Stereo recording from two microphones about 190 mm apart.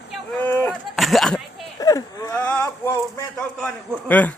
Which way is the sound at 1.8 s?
20° left (ahead or behind).